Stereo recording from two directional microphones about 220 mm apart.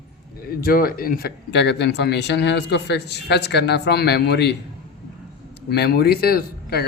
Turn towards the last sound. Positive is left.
turn(degrees=45)  # may be behind; listen again after turning